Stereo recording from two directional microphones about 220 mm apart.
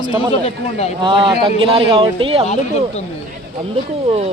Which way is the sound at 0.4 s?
30° left (ahead or behind).